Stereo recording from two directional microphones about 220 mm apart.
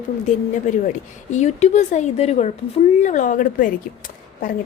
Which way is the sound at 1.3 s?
30° left (ahead or behind).